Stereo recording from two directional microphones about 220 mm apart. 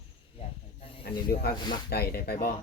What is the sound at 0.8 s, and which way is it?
Snake, 25° left (ahead or behind).